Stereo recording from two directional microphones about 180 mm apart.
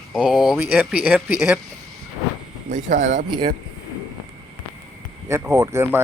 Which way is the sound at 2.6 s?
45° right (ahead or behind).